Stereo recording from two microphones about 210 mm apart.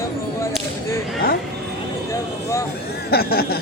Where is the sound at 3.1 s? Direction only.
45° left (ahead or behind).